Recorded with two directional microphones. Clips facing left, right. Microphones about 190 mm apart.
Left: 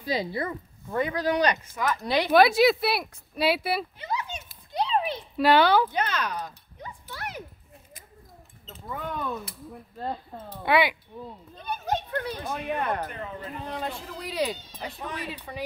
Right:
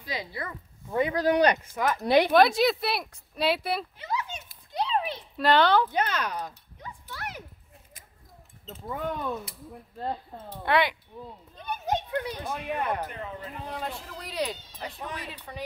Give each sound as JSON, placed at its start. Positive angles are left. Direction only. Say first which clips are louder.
{"t": 0.0, "sound": "speech", "louder": "left 7 dB", "side_deg": 30}
{"t": 1.1, "sound": "speech", "louder": "right 3 dB", "side_deg": -50}
{"t": 2.3, "sound": "speech", "louder": "left 2 dB", "side_deg": 5}
{"t": 4.7, "sound": "a sound", "louder": "left 2 dB", "side_deg": 5}
{"t": 6.1, "sound": "speech", "louder": "left 1 dB", "side_deg": -10}
{"t": 7.1, "sound": "a sound", "louder": "left 2 dB", "side_deg": 0}
{"t": 8.6, "sound": "speech", "louder": "right 3 dB", "side_deg": -20}
{"t": 10.6, "sound": "speech", "louder": "left 2 dB", "side_deg": 10}
{"t": 11.5, "sound": "a child's voice", "louder": "even", "side_deg": -15}
{"t": 12.5, "sound": "speech", "louder": "left 1 dB", "side_deg": -5}